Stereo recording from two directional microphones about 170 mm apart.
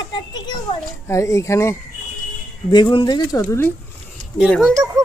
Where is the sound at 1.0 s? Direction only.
15° left (ahead or behind).